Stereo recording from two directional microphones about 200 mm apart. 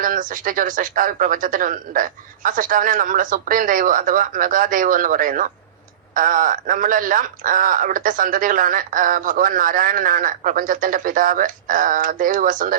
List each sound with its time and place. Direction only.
0.0 s speech: 40° right (ahead or behind)